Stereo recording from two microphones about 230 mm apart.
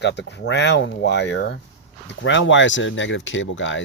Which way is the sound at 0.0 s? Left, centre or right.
Left.